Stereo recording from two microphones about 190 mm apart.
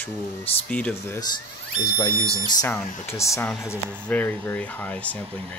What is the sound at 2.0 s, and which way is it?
Speech, 25° left (ahead or behind).